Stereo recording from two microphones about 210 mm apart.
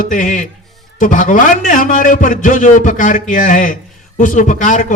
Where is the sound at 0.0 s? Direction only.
35° left (ahead or behind).